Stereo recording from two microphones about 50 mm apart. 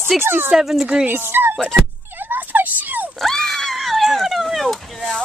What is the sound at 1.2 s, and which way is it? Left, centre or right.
Speech, right.